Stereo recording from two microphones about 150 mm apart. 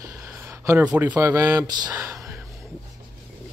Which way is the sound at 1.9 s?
20° right (ahead or behind).